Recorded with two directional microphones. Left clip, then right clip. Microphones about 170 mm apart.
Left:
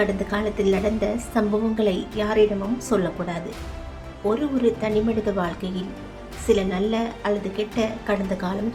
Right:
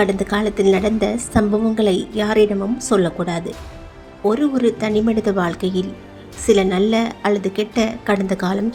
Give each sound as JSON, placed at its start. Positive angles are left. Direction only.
{"t": 0.0, "sound": "a woman's voice", "side_deg": -35}